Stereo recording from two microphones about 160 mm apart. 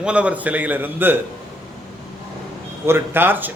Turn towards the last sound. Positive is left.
turn(degrees=-10)  # may be behind; listen again after turning